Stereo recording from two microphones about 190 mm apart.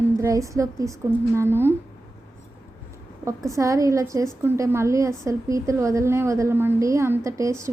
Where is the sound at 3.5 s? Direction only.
15° right (ahead or behind).